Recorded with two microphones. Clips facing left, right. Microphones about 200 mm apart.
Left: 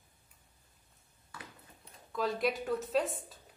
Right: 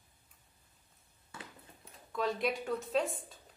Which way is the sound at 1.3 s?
25° right (ahead or behind).